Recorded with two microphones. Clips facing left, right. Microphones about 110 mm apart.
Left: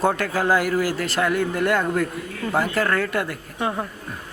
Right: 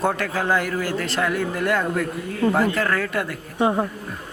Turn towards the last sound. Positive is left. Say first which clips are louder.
# right 5 dB
turn(degrees=-25)  # may be behind; listen again after turning